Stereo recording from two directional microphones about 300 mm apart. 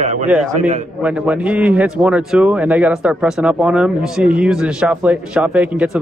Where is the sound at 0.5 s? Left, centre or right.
Right.